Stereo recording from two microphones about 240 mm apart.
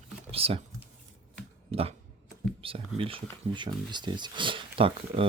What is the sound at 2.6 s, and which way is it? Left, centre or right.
Speech, right.